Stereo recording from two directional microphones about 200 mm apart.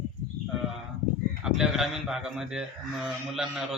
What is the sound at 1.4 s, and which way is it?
Speech, centre (ahead or behind).